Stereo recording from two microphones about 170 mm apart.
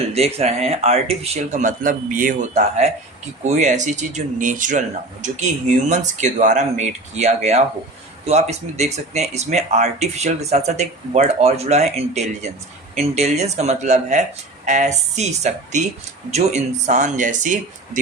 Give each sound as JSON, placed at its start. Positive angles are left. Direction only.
{"t": 0.1, "sound": "speech", "side_deg": -40}
{"t": 5.9, "sound": "speech", "side_deg": -45}